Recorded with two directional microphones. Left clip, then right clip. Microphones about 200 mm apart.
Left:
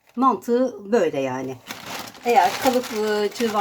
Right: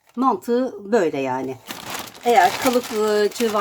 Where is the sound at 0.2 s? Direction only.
25° right (ahead or behind).